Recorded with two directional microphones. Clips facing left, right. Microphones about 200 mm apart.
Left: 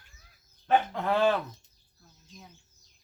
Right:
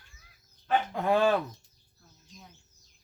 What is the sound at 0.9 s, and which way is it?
Speech, 10° right (ahead or behind).